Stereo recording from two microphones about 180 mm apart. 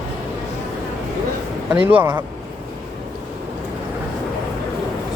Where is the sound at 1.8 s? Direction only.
10° right (ahead or behind).